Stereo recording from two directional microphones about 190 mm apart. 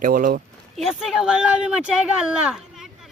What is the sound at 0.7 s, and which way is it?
Speech, centre (ahead or behind).